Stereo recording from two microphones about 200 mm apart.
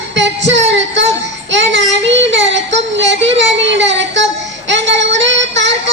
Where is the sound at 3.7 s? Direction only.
65° right (ahead or behind).